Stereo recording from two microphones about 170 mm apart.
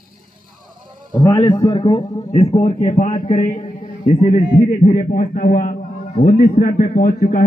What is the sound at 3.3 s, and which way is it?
A man's voice, 50° left (ahead or behind).